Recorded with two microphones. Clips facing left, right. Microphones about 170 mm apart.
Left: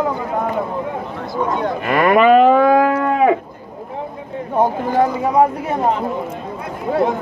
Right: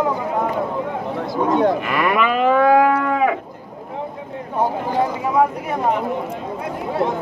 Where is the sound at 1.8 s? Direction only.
40° left (ahead or behind).